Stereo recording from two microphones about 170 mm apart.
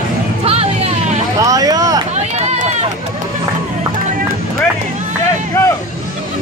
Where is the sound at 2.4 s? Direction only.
40° right (ahead or behind).